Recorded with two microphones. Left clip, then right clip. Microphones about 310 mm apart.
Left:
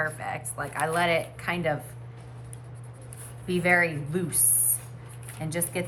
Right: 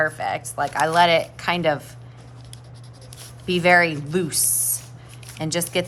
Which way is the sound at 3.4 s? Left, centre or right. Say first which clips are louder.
Right 7 dB; centre.